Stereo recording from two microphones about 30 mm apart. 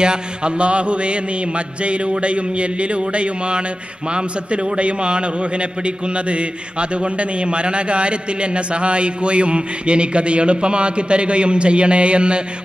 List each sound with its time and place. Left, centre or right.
0.0 s a man's voice: right